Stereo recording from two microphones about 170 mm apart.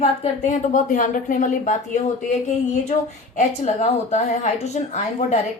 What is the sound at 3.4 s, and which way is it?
A woman's voice, 45° left (ahead or behind).